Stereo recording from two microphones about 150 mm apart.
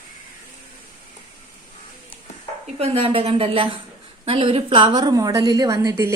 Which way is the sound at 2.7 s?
40° right (ahead or behind).